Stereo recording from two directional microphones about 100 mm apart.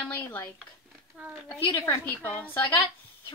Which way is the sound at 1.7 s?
25° left (ahead or behind).